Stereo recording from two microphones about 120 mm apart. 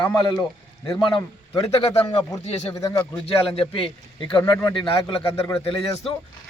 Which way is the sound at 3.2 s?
50° left (ahead or behind).